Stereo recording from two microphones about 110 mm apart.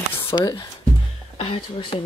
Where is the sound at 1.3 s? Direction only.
55° left (ahead or behind).